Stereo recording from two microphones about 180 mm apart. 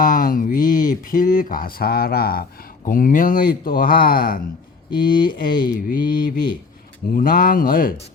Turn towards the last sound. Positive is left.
turn(degrees=50)  # may be behind; listen again after turning